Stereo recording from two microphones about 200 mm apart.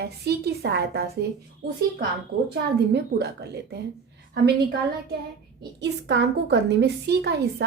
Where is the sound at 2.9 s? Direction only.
55° right (ahead or behind).